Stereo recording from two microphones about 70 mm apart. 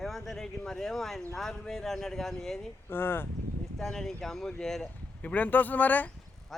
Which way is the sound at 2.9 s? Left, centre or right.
Left.